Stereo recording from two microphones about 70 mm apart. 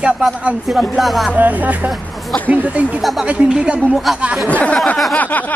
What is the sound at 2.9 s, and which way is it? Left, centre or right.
Speech, centre.